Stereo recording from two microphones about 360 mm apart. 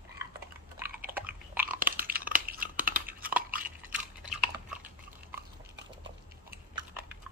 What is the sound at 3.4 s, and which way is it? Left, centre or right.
Crunch, right.